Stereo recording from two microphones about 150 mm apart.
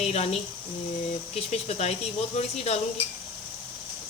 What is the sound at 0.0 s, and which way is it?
Speech, 45° left (ahead or behind).